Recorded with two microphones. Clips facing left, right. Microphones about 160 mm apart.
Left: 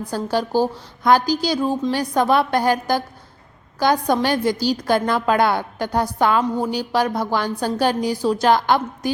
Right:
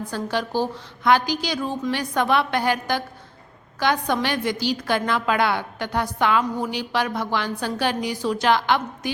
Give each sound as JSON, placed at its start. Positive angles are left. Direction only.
{"t": 0.1, "sound": "a woman's voice", "side_deg": 40}